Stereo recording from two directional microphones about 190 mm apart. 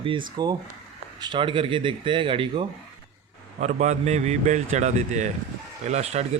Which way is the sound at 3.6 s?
35° right (ahead or behind).